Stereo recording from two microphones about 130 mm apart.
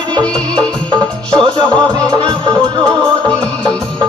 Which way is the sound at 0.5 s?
35° right (ahead or behind).